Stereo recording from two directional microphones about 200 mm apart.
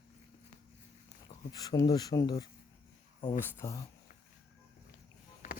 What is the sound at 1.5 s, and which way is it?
Speech, 20° left (ahead or behind).